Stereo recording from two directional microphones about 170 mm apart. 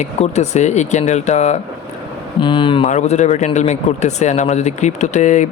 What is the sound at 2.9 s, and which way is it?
Speech, 45° left (ahead or behind).